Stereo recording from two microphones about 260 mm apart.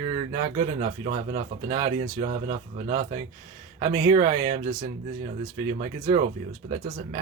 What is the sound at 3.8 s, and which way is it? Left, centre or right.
Speech, centre.